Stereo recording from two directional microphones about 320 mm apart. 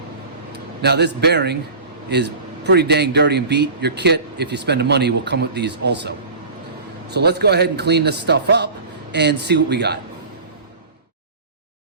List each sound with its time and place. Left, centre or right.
0.8 s a man's voice: right